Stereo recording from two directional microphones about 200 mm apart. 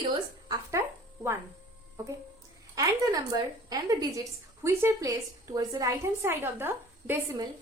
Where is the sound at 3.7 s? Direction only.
15° right (ahead or behind).